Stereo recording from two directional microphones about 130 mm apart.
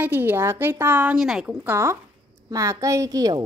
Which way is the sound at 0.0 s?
15° right (ahead or behind).